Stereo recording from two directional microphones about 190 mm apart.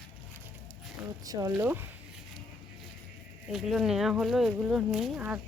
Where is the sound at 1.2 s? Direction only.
20° right (ahead or behind).